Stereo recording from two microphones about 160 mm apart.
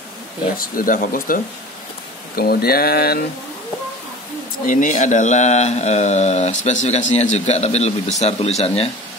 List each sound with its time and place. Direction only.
0.6 s speech: 60° left (ahead or behind)
2.3 s speech: 75° left (ahead or behind)
4.6 s speech: 55° left (ahead or behind)